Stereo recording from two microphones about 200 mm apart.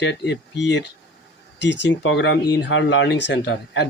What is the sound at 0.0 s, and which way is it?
Speech, 60° left (ahead or behind).